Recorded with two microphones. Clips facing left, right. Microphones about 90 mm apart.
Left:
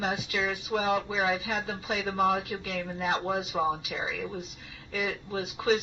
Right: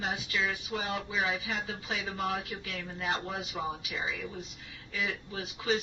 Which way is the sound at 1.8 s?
55° left (ahead or behind).